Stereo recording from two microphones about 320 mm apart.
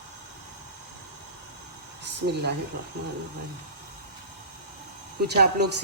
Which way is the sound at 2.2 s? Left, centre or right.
Right.